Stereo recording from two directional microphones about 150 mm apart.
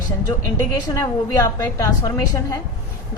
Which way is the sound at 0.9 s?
20° left (ahead or behind).